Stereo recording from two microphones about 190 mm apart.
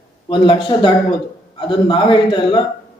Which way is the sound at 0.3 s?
25° left (ahead or behind).